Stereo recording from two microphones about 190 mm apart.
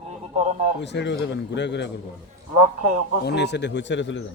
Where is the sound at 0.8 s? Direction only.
65° left (ahead or behind).